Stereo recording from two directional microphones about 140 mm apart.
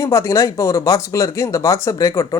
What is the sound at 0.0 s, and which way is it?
A man's voice, 20° left (ahead or behind).